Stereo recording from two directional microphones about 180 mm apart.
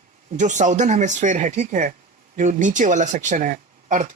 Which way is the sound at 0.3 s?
45° right (ahead or behind).